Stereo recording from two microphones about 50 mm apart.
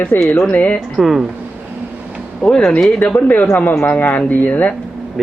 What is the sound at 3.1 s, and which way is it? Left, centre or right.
Speech, left.